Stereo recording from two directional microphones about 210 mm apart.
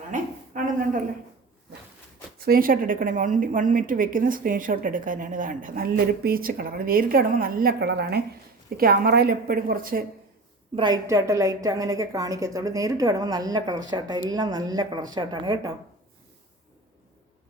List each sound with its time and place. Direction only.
0.1 s a sound: 40° right (ahead or behind)
2.4 s a woman's voice: 45° right (ahead or behind)
10.8 s a woman's voice: 20° right (ahead or behind)